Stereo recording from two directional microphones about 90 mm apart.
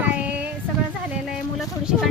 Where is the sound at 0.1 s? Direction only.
15° right (ahead or behind).